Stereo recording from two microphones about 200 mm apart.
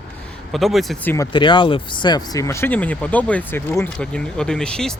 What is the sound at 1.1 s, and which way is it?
Speech, 20° left (ahead or behind).